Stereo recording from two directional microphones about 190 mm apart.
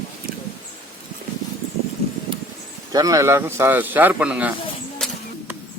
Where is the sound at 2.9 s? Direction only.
20° right (ahead or behind).